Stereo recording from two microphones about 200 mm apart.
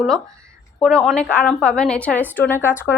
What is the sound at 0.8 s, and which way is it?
A woman's voice, 5° left (ahead or behind).